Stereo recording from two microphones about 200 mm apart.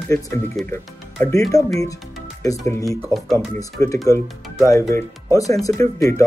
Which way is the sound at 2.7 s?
15° left (ahead or behind).